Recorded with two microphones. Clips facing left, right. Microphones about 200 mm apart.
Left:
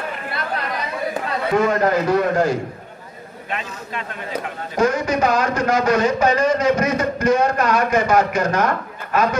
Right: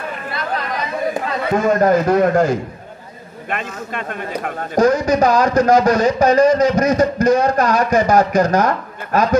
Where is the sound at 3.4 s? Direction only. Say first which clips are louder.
Right 4 dB; 55° right (ahead or behind).